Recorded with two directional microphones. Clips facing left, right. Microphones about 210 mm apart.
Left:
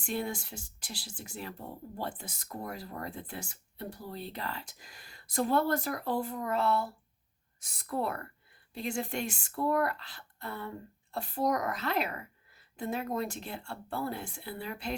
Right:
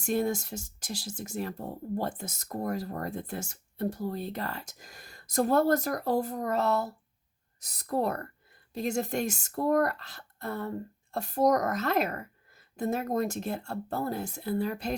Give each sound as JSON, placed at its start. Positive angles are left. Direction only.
{"t": 0.0, "sound": "a woman's voice", "side_deg": -45}